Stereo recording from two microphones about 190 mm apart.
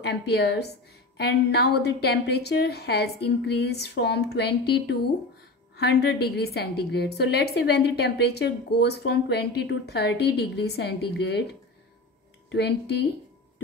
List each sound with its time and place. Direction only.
0.0 s a woman's voice: 60° left (ahead or behind)
12.4 s a woman's voice: 60° left (ahead or behind)